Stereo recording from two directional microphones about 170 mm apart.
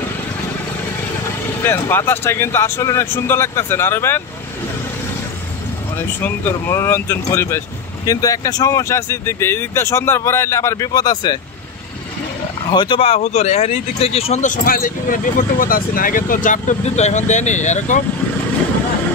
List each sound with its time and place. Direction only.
1.6 s speech: 15° left (ahead or behind)
5.9 s speech: 10° left (ahead or behind)
12.7 s speech: 25° left (ahead or behind); by 18.0 s 45° left (ahead or behind)